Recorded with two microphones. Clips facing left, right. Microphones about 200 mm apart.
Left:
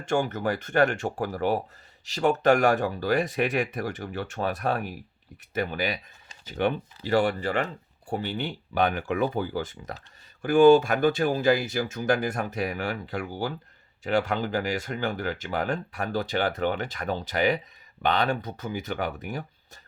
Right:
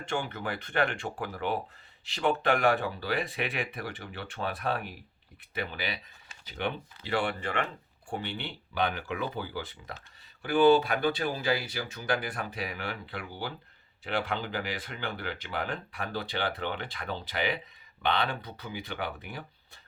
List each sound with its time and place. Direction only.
0.0 s speech: 45° left (ahead or behind)